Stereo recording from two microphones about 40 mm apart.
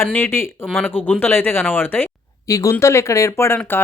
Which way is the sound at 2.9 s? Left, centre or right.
Left.